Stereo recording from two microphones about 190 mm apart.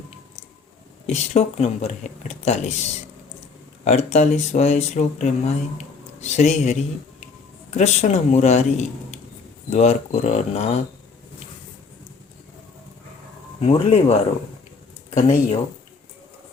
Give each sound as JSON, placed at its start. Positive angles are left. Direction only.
{"t": 1.0, "sound": "speech", "side_deg": 35}
{"t": 3.8, "sound": "speech", "side_deg": 35}
{"t": 13.6, "sound": "speech", "side_deg": 30}